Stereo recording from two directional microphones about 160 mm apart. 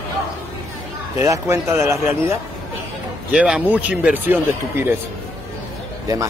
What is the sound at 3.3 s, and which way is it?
Speech, 5° right (ahead or behind).